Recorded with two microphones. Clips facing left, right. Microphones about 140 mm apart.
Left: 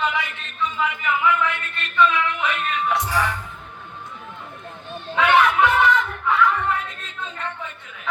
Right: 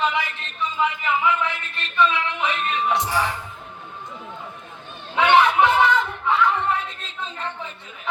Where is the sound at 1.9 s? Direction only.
30° right (ahead or behind).